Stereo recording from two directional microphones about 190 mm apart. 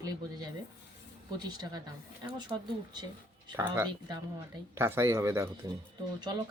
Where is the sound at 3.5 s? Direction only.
15° right (ahead or behind).